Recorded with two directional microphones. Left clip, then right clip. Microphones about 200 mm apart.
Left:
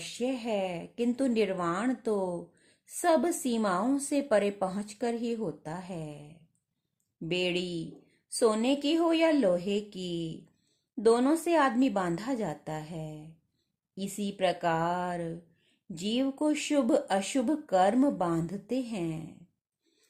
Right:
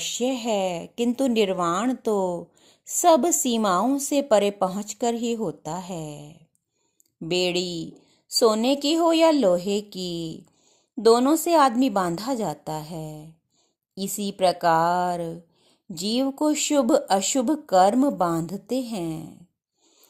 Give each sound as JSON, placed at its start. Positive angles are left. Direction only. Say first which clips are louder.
{"t": 0.0, "sound": "speech", "louder": "right 8 dB", "side_deg": -30}